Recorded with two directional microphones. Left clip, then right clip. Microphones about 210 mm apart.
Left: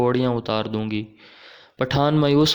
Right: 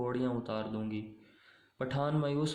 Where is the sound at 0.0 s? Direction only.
45° left (ahead or behind).